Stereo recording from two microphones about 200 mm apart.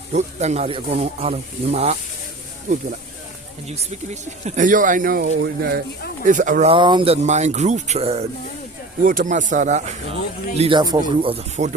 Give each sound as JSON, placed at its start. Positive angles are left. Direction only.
{"t": 0.1, "sound": "speech", "side_deg": -35}
{"t": 3.7, "sound": "speech", "side_deg": -35}
{"t": 5.3, "sound": "speech", "side_deg": -60}
{"t": 6.2, "sound": "speech", "side_deg": -40}
{"t": 9.0, "sound": "speech", "side_deg": -40}
{"t": 10.6, "sound": "speech", "side_deg": -25}